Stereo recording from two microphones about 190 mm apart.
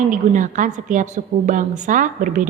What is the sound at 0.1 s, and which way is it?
A woman's voice, 40° right (ahead or behind).